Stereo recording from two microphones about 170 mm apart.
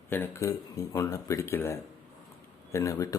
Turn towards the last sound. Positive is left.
turn(degrees=20)  # may be behind; listen again after turning